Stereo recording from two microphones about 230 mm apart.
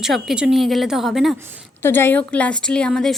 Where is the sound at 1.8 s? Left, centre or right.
Centre.